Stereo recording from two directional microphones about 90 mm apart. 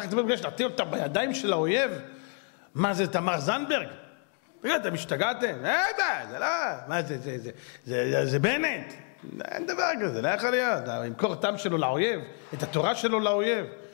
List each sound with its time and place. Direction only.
0.0 s a man's voice: 15° left (ahead or behind)